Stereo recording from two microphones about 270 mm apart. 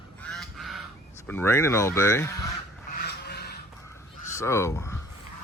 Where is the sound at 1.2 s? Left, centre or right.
Centre.